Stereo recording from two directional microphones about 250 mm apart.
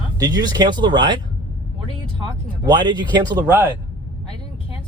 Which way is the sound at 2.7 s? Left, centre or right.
Centre.